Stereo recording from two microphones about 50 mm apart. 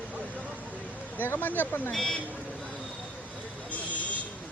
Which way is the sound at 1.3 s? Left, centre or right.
Left.